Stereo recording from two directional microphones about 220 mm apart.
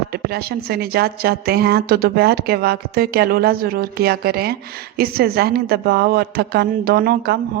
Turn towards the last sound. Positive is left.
turn(degrees=-45)  # may be behind; listen again after turning